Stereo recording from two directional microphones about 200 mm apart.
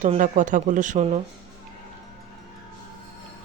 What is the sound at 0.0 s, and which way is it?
Speech, 40° right (ahead or behind).